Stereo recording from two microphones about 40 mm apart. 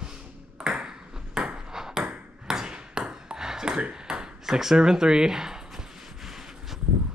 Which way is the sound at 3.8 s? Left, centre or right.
Right.